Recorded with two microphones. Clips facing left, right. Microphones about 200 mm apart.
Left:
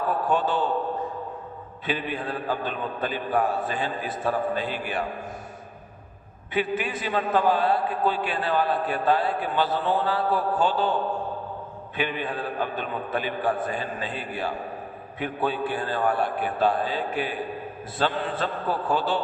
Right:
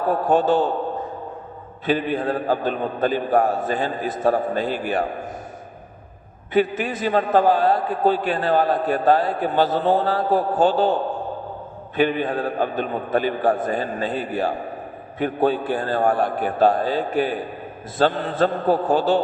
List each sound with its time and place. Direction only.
0.1 s a man's voice: 45° right (ahead or behind)
1.9 s a man's voice: 45° right (ahead or behind)
6.5 s a man's voice: 40° right (ahead or behind)
11.9 s a man's voice: 45° right (ahead or behind)